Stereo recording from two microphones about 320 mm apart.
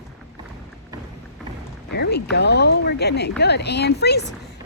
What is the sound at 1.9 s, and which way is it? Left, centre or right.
A woman's voice, left.